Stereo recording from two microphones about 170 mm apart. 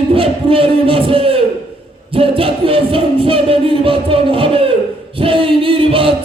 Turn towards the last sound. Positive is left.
turn(degrees=-30)  # may be behind; listen again after turning